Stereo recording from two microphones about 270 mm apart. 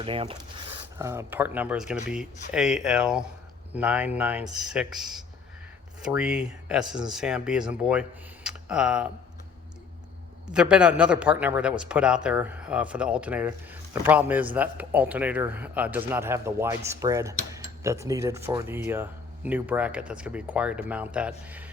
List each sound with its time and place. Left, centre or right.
0.0 s a man's voice: centre
10.5 s a man's voice: centre